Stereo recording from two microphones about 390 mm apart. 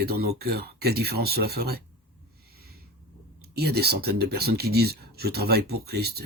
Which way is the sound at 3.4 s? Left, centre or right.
Right.